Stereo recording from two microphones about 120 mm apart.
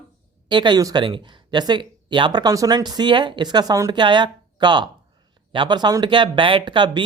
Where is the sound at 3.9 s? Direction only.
40° right (ahead or behind).